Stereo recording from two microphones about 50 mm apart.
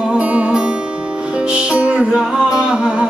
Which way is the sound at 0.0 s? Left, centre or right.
Right.